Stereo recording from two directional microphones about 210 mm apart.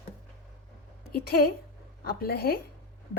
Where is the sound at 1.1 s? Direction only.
45° left (ahead or behind).